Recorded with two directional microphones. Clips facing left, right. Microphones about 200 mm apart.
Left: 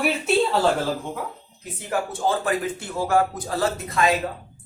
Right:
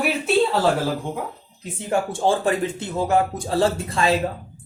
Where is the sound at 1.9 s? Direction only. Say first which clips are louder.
Right 3 dB; 30° right (ahead or behind).